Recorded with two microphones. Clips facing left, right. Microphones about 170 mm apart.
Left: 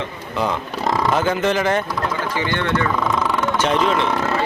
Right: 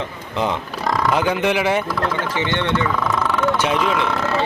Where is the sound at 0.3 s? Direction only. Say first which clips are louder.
Even; 20° right (ahead or behind).